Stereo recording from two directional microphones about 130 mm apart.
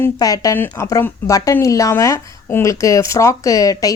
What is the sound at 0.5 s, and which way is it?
Speech, 15° left (ahead or behind).